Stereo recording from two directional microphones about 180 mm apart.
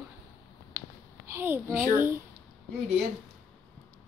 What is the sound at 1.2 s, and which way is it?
Speech, 10° right (ahead or behind).